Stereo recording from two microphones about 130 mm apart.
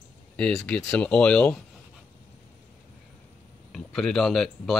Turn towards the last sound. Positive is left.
turn(degrees=0)  # may be behind; listen again after turning